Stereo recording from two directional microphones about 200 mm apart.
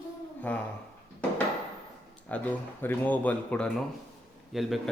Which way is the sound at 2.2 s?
10° left (ahead or behind).